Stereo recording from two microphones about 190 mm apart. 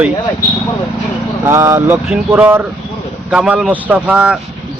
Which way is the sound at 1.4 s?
15° right (ahead or behind).